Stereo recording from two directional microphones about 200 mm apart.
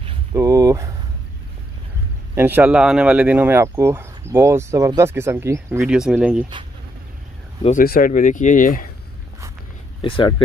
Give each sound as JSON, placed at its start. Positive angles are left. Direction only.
{"t": 0.3, "sound": "speech", "side_deg": -15}
{"t": 2.3, "sound": "speech", "side_deg": -10}
{"t": 7.8, "sound": "speech", "side_deg": 45}
{"t": 10.0, "sound": "speech", "side_deg": 25}